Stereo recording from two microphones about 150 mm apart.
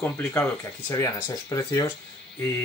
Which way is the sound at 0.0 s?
15° left (ahead or behind).